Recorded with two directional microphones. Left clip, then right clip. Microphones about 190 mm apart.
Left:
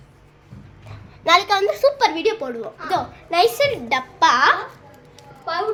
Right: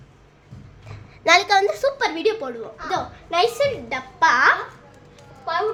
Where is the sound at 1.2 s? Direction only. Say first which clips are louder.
Even; 15° right (ahead or behind).